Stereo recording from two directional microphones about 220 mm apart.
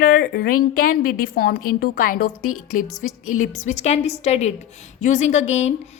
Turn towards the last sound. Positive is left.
turn(degrees=30)  # may be behind; listen again after turning